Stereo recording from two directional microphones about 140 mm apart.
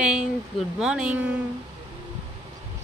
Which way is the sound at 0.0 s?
5° right (ahead or behind).